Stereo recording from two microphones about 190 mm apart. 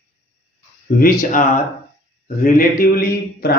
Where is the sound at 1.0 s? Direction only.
50° left (ahead or behind).